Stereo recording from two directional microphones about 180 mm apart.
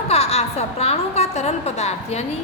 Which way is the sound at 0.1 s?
35° left (ahead or behind).